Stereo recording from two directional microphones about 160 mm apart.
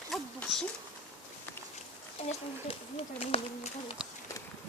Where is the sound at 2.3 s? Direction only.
40° left (ahead or behind).